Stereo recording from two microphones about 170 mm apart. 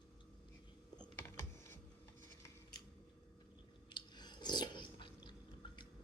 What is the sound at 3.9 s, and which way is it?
Chewing, 25° left (ahead or behind).